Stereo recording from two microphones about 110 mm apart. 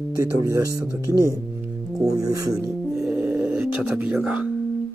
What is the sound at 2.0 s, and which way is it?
Speech, 35° right (ahead or behind).